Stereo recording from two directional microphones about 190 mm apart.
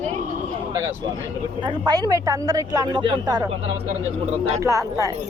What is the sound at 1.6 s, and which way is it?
Speech, 20° right (ahead or behind).